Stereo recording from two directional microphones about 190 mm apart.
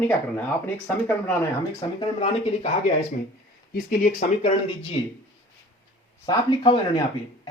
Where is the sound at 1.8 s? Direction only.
30° left (ahead or behind).